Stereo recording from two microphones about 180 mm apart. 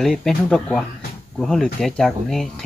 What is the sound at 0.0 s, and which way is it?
A woman's voice, centre (ahead or behind).